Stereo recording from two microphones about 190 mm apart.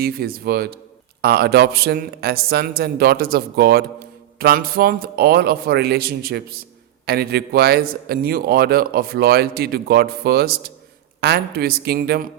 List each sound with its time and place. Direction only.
0.0 s a man's voice: 55° right (ahead or behind)